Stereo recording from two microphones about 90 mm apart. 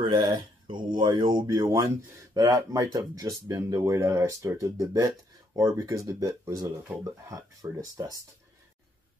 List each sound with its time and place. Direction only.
0.0 s speech: 65° right (ahead or behind); by 8.2 s 40° right (ahead or behind)